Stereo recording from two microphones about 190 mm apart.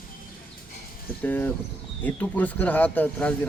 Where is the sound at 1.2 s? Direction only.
10° left (ahead or behind).